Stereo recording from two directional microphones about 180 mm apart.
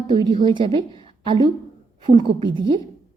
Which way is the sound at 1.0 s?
25° right (ahead or behind).